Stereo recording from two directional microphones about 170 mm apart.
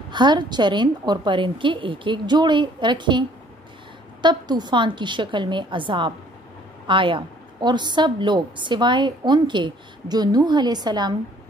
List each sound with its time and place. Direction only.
0.1 s a woman's voice: 25° right (ahead or behind)